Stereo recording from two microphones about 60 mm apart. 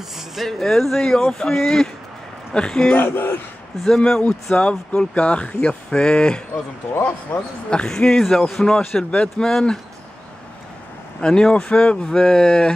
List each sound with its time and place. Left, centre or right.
0.4 s speech: centre
3.0 s a man's voice: left
3.8 s speech: centre
4.6 s speech: centre
6.5 s a man's voice: left
7.7 s speech: centre
11.1 s speech: centre